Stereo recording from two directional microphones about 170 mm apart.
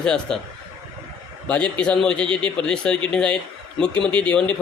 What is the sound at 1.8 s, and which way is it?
A man's voice, 5° left (ahead or behind).